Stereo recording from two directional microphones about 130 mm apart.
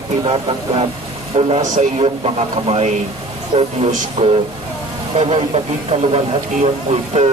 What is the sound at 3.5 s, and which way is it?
Speech, 40° right (ahead or behind).